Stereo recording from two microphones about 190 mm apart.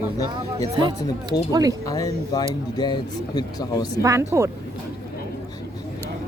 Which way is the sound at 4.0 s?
15° right (ahead or behind).